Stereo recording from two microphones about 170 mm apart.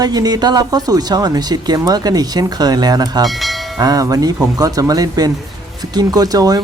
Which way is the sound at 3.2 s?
Centre (ahead or behind).